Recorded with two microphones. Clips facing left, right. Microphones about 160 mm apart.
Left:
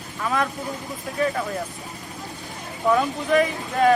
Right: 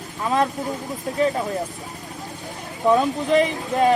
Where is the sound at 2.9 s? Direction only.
20° right (ahead or behind).